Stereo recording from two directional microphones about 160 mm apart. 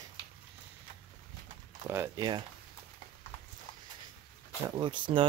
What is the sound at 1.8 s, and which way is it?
Speech, 20° right (ahead or behind).